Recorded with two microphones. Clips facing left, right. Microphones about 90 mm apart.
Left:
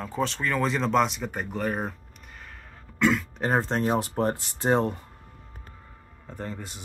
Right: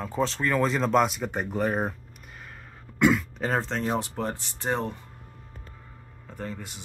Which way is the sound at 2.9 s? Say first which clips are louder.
Right 2 dB; 5° right (ahead or behind).